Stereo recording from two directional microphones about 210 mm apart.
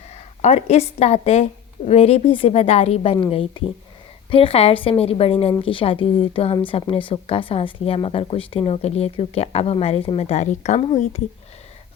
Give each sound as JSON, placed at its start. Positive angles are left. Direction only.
{"t": 0.1, "sound": "a woman's voice", "side_deg": 30}